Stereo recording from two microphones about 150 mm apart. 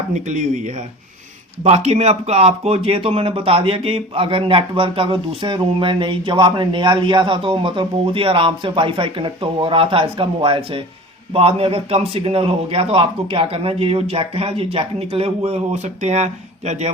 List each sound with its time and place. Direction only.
0.1 s speech: 55° right (ahead or behind)